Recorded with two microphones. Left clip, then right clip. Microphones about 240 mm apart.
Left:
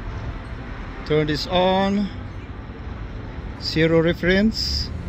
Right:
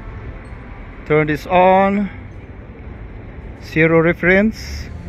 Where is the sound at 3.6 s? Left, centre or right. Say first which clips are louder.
Right 5 dB; centre.